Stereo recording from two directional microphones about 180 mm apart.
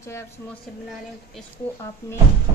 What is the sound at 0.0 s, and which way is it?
Speech, 15° left (ahead or behind).